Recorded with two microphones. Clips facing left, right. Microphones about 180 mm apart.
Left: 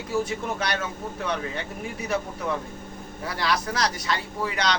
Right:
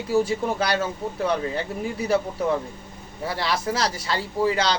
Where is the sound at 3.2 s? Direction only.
30° right (ahead or behind).